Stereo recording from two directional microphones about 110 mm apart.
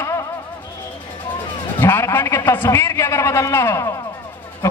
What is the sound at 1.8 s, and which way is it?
A man's voice, 20° left (ahead or behind).